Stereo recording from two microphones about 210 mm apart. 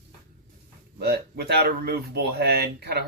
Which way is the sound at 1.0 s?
50° right (ahead or behind).